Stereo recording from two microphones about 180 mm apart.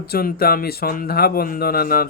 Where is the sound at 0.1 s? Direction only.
55° left (ahead or behind).